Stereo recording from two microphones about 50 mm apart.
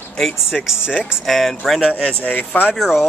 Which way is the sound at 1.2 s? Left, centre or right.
Centre.